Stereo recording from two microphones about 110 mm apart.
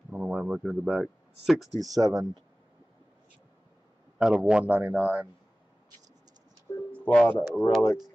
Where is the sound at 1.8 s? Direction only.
35° right (ahead or behind).